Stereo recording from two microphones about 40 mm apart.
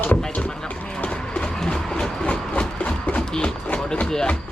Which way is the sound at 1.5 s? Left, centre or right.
Centre.